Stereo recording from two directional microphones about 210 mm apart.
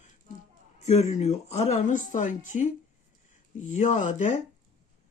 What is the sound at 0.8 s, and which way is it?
Speech, 30° left (ahead or behind).